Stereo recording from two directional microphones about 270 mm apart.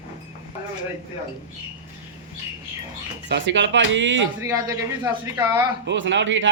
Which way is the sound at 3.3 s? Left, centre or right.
Right.